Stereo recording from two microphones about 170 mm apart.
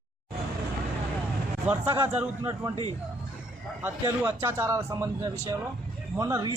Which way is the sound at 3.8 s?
20° right (ahead or behind).